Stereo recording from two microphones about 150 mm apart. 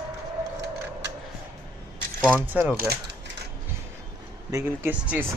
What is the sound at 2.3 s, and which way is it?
Speech, 10° right (ahead or behind).